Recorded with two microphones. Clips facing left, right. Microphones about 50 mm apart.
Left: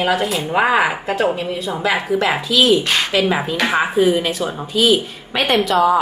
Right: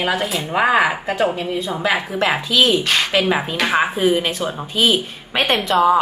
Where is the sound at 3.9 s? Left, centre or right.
Right.